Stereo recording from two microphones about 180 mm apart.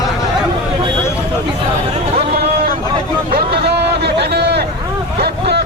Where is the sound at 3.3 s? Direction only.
60° right (ahead or behind).